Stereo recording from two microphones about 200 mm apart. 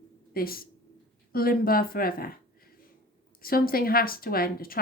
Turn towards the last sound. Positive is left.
turn(degrees=45)  # may be behind; listen again after turning